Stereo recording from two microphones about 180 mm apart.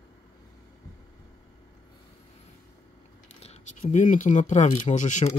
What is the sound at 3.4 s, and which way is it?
Speech, 40° left (ahead or behind).